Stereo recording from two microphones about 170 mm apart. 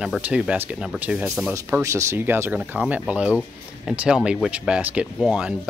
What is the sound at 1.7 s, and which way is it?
Speech, 15° right (ahead or behind).